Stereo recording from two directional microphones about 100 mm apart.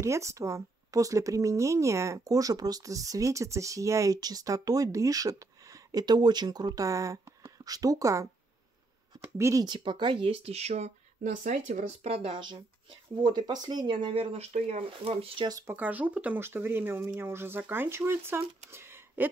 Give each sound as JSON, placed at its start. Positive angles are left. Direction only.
{"t": 0.0, "sound": "speech", "side_deg": -30}
{"t": 9.4, "sound": "speech", "side_deg": -30}
{"t": 9.7, "sound": "speech", "side_deg": -50}
{"t": 12.0, "sound": "speech", "side_deg": -90}
{"t": 12.4, "sound": "speech", "side_deg": -50}
{"t": 14.2, "sound": "speech", "side_deg": -90}
{"t": 15.6, "sound": "speech", "side_deg": -20}